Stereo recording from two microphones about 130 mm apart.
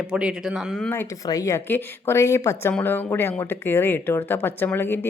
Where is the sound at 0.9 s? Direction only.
20° left (ahead or behind).